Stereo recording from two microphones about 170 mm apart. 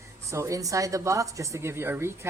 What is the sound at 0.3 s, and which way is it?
Speech, 15° right (ahead or behind).